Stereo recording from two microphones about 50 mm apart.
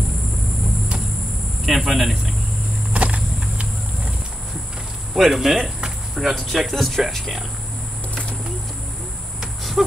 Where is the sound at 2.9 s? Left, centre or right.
Right.